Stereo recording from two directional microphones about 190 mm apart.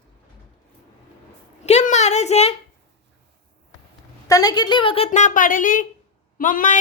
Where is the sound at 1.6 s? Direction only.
35° left (ahead or behind).